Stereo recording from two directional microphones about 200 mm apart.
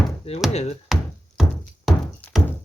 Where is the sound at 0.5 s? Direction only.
30° left (ahead or behind).